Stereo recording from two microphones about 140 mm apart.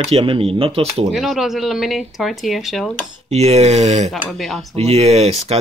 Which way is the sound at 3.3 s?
50° right (ahead or behind).